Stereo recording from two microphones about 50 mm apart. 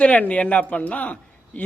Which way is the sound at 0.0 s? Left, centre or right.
Left.